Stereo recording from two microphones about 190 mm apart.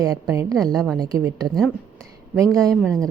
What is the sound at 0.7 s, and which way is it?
Speech, centre (ahead or behind).